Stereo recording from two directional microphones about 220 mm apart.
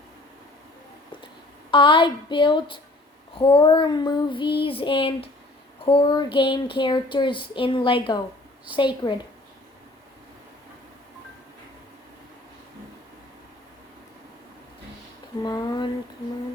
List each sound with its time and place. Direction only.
1.7 s speech: 20° left (ahead or behind)
15.4 s speech: 20° left (ahead or behind)